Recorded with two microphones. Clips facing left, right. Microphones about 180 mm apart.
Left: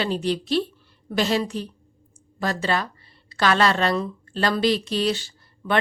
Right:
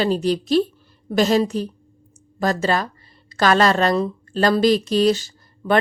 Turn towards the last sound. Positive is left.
turn(degrees=-40)  # may be behind; listen again after turning